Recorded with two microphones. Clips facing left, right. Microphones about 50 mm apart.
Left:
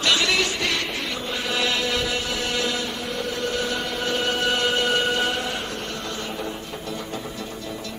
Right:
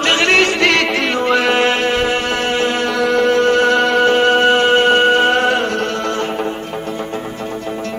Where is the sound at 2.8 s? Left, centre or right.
Right.